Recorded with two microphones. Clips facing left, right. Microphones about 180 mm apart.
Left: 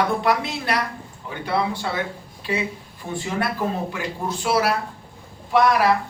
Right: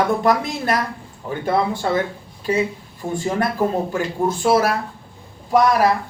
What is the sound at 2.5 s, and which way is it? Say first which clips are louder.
Speech: right 6 dB; 45° right (ahead or behind).